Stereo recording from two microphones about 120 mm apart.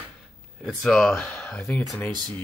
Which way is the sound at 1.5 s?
15° left (ahead or behind).